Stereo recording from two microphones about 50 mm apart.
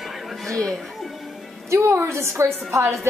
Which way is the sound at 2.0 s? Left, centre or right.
Right.